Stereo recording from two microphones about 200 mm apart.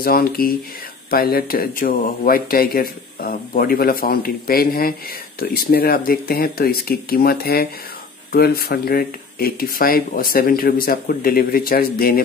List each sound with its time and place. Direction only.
0.0 s speech: 45° left (ahead or behind)